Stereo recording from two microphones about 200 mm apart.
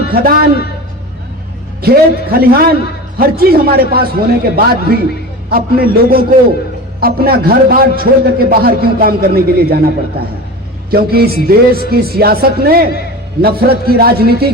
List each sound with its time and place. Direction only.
0.1 s a man's voice: 45° right (ahead or behind)
1.8 s a man's voice: 50° right (ahead or behind)